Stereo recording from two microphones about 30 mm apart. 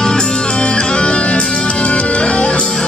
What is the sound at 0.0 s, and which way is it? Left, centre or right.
Music, left.